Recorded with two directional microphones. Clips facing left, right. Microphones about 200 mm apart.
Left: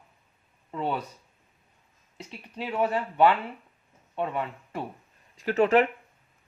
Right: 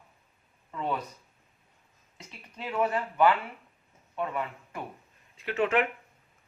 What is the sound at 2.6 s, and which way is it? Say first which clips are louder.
Speech: left 2 dB; 30° left (ahead or behind).